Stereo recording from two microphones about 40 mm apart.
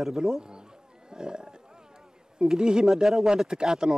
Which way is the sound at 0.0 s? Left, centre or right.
Centre.